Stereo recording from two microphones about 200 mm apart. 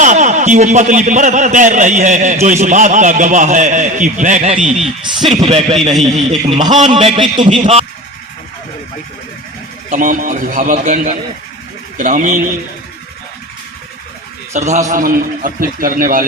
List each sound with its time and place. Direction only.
0.0 s a man's voice: 35° right (ahead or behind)
4.6 s speech: centre (ahead or behind)
5.5 s a man's voice: 30° right (ahead or behind)
6.0 s speech: centre (ahead or behind)
6.9 s a man's voice: 25° right (ahead or behind)
9.9 s a man's voice: 40° right (ahead or behind)
14.5 s a man's voice: 35° right (ahead or behind)